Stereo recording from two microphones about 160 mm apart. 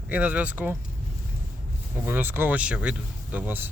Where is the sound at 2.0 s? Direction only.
15° right (ahead or behind).